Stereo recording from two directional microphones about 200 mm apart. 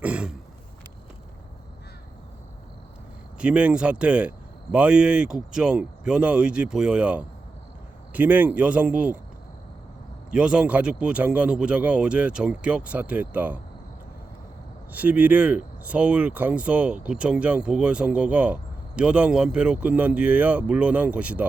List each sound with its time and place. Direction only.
0.0 s throat clearing: 5° right (ahead or behind)
3.3 s speech: 5° right (ahead or behind)
10.3 s speech: 5° right (ahead or behind)
14.9 s speech: 10° right (ahead or behind)